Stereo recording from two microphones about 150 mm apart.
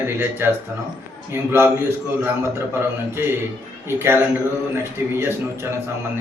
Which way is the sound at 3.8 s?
15° right (ahead or behind).